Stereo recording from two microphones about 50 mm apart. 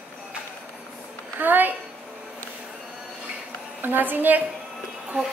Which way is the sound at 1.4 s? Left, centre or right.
Right.